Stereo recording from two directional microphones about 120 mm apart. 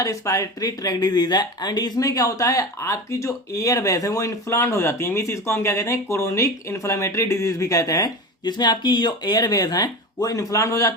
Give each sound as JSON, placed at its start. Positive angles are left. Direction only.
{"t": 0.0, "sound": "speech", "side_deg": 25}